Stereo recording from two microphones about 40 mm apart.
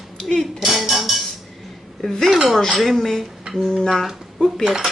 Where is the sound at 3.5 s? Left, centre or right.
Centre.